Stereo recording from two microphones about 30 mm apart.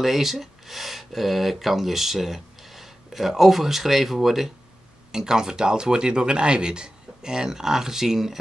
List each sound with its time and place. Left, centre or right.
0.0 s speech: centre
5.1 s speech: right